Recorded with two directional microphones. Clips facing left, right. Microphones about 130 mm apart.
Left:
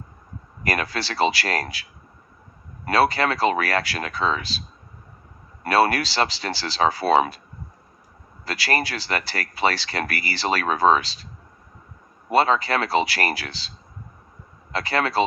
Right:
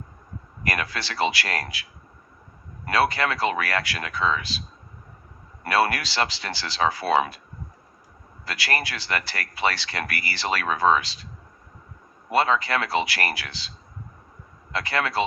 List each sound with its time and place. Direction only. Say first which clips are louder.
0.6 s speech: left 3 dB; 35° left (ahead or behind)
5.6 s speech: left 3 dB; 35° left (ahead or behind)
8.4 s speech: left 4 dB; 35° left (ahead or behind)
12.3 s speech: left 3 dB; 35° left (ahead or behind)
14.7 s speech: left 3 dB; 35° left (ahead or behind)